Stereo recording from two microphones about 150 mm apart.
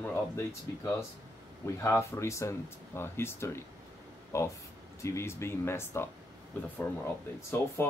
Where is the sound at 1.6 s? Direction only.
20° left (ahead or behind).